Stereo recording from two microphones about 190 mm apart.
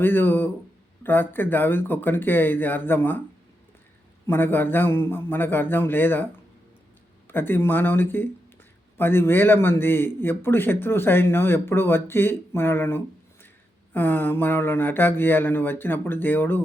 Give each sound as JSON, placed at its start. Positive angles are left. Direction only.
{"t": 0.0, "sound": "a man's voice", "side_deg": 10}
{"t": 4.3, "sound": "a man's voice", "side_deg": 10}